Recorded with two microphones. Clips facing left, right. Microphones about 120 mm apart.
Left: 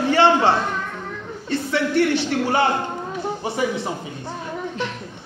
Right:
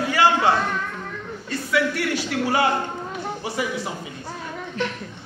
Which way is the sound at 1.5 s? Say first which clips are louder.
Left 3 dB; 25° left (ahead or behind).